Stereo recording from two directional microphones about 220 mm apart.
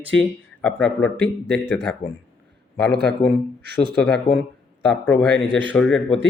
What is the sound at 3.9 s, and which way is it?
Speech, 5° left (ahead or behind).